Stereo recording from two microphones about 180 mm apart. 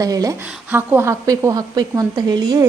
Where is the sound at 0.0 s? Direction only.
20° right (ahead or behind).